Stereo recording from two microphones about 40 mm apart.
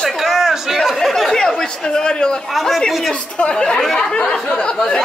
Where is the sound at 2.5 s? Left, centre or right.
Centre.